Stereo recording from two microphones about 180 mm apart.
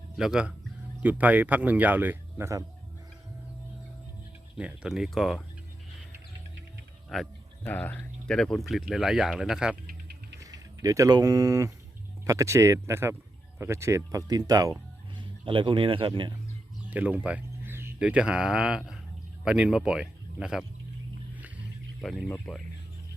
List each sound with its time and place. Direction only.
0.2 s speech: 5° right (ahead or behind)
4.5 s speech: 5° right (ahead or behind)
7.1 s speech: centre (ahead or behind)
10.8 s a man's voice: 20° right (ahead or behind)
16.9 s speech: 10° right (ahead or behind)
22.0 s speech: centre (ahead or behind)